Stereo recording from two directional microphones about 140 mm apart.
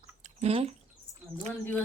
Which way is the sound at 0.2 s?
50° right (ahead or behind).